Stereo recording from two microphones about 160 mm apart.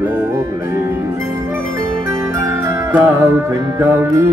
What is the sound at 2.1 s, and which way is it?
Music, 20° right (ahead or behind).